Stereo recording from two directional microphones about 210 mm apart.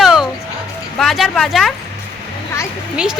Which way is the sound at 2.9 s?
5° right (ahead or behind).